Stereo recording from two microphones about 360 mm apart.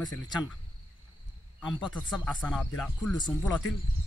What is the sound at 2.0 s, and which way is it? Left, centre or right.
Speech, centre.